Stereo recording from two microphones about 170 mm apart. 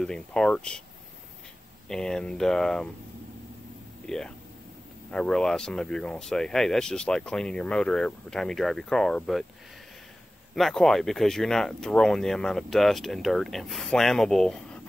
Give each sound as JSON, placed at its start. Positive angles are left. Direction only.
{"t": 0.0, "sound": "speech", "side_deg": 5}
{"t": 1.9, "sound": "speech", "side_deg": 5}
{"t": 4.0, "sound": "speech", "side_deg": 5}
{"t": 10.5, "sound": "speech", "side_deg": 0}